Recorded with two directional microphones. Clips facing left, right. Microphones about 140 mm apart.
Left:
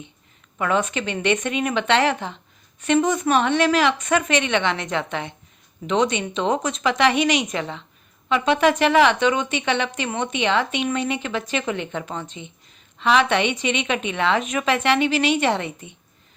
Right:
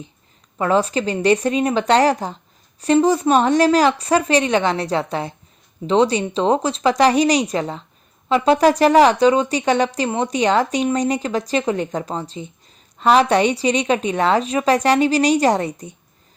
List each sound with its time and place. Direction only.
0.6 s speech: 35° right (ahead or behind)